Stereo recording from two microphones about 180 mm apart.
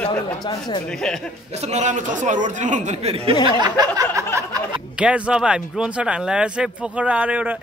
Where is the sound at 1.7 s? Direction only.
40° right (ahead or behind).